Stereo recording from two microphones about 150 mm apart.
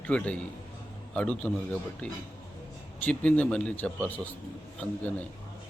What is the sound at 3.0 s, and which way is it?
Speech, 10° left (ahead or behind).